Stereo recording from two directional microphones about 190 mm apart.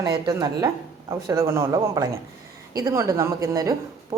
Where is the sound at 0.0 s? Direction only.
20° right (ahead or behind).